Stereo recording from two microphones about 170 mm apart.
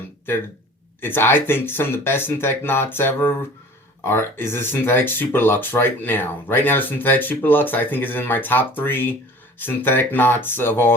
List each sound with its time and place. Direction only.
1.0 s speech: 10° left (ahead or behind)